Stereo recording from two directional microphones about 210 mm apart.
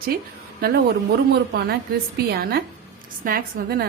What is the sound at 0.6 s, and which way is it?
Speech, 45° right (ahead or behind).